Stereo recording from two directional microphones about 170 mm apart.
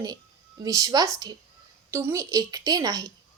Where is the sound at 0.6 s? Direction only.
20° right (ahead or behind).